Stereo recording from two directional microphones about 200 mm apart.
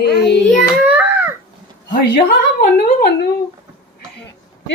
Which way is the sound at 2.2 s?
45° left (ahead or behind).